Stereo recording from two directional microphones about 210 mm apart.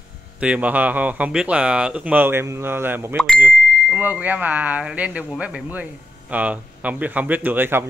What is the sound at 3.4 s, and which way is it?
A man's voice, 10° right (ahead or behind).